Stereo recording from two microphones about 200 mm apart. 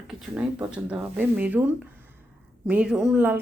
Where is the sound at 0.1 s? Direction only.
5° right (ahead or behind).